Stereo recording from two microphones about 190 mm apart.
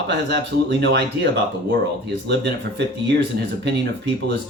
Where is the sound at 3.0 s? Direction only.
65° right (ahead or behind).